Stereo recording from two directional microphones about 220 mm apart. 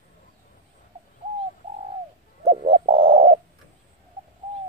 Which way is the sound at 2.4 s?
25° right (ahead or behind).